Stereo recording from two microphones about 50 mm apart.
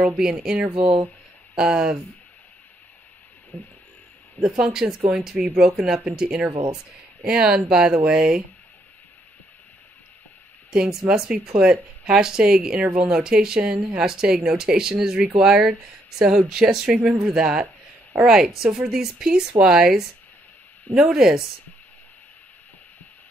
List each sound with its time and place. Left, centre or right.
0.2 s speech: centre
3.5 s a sound: left
4.4 s speech: centre
10.7 s speech: centre